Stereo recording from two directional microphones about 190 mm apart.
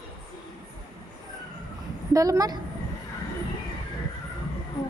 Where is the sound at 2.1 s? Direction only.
15° right (ahead or behind).